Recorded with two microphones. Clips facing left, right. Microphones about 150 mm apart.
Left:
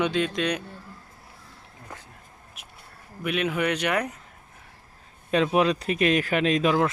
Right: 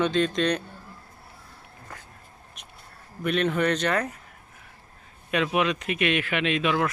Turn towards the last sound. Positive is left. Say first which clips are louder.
# left 3 dB
turn(degrees=35)  # may be behind; listen again after turning